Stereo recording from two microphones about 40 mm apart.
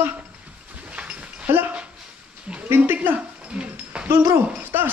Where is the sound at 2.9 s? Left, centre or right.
Right.